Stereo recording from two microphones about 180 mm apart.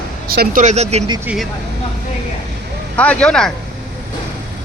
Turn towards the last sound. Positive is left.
turn(degrees=5)  # may be behind; listen again after turning